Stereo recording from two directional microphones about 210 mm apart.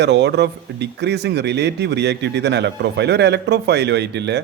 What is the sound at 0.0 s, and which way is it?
Speech, 55° right (ahead or behind).